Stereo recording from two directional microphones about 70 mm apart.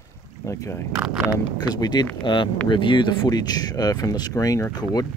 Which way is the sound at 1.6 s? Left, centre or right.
Left.